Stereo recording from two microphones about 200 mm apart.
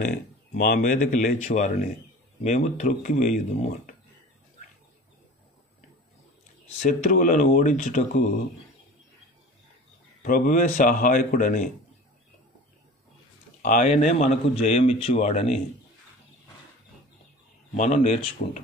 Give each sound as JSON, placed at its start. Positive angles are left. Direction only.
{"t": 0.6, "sound": "a man's voice", "side_deg": 45}
{"t": 6.8, "sound": "a man's voice", "side_deg": 40}
{"t": 10.2, "sound": "a man's voice", "side_deg": 40}
{"t": 13.6, "sound": "a man's voice", "side_deg": 45}
{"t": 17.7, "sound": "a man's voice", "side_deg": 35}